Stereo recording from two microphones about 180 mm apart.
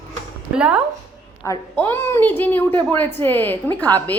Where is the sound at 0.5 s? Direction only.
5° right (ahead or behind).